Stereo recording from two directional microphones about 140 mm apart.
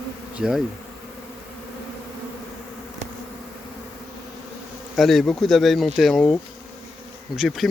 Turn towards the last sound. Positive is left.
turn(degrees=0)  # may be behind; listen again after turning